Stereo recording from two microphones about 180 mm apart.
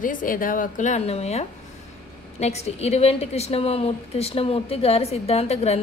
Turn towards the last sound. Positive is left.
turn(degrees=35)  # may be behind; listen again after turning